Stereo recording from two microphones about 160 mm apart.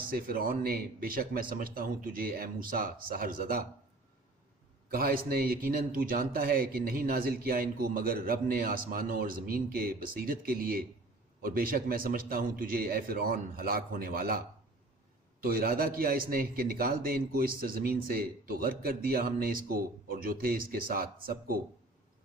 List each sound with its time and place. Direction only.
0.1 s speech: 65° right (ahead or behind)
4.9 s speech: 70° right (ahead or behind)